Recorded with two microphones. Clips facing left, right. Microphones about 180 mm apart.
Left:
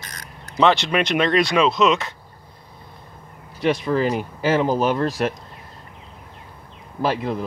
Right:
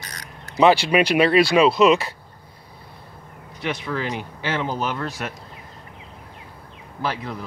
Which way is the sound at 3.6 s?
40° left (ahead or behind).